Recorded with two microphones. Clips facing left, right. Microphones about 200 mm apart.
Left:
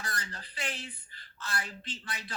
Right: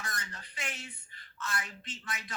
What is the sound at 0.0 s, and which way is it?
Speech, 35° left (ahead or behind).